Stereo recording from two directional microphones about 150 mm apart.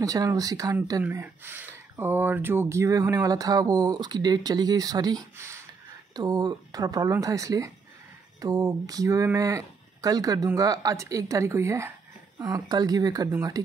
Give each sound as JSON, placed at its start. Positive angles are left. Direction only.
{"t": 0.0, "sound": "speech", "side_deg": -25}
{"t": 1.0, "sound": "speech", "side_deg": -15}